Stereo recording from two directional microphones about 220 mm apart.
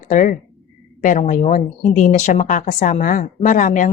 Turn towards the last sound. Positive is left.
turn(degrees=35)  # may be behind; listen again after turning